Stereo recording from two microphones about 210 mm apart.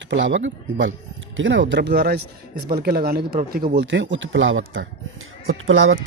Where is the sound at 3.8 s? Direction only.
60° right (ahead or behind).